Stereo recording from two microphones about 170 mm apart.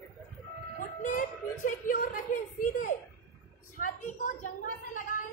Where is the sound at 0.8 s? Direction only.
50° left (ahead or behind).